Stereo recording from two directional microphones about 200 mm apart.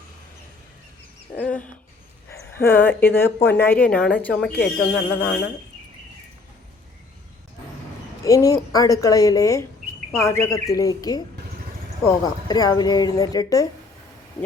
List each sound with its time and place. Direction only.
1.4 s speech: 5° left (ahead or behind)
8.2 s speech: 15° left (ahead or behind)